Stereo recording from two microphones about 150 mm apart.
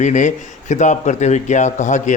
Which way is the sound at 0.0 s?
55° left (ahead or behind).